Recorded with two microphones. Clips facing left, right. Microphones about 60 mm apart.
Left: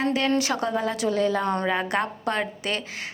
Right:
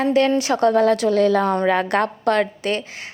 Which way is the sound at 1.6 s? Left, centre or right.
Right.